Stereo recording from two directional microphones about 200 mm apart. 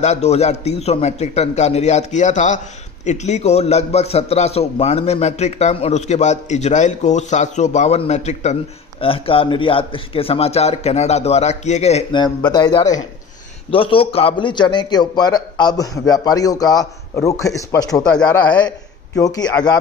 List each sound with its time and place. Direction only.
0.0 s a man's voice: 35° left (ahead or behind); by 18.0 s 15° left (ahead or behind)
18.0 s speech: 5° left (ahead or behind)
19.1 s speech: 20° left (ahead or behind)